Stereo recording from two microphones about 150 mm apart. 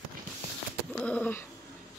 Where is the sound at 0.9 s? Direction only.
10° left (ahead or behind).